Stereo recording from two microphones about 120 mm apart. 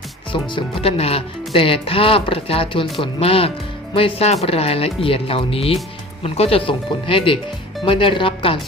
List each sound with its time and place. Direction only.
0.3 s speech: 45° left (ahead or behind)